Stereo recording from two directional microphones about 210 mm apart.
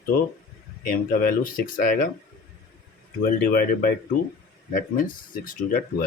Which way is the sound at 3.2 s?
40° left (ahead or behind).